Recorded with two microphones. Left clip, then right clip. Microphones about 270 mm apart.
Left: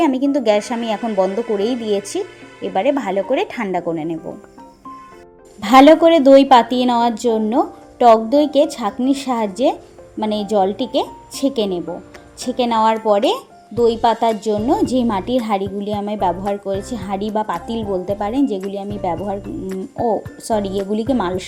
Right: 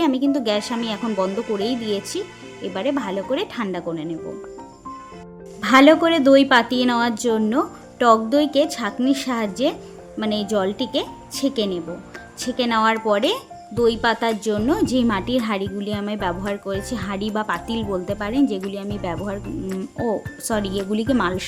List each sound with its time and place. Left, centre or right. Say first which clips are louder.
0.3 s a woman's voice: left 5 dB; centre
1.5 s speech: left 4 dB; right
2.7 s speech: left 7 dB; centre
5.6 s speech: left 5 dB; centre